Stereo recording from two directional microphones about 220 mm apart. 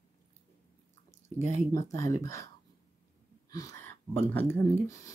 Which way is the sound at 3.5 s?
15° left (ahead or behind).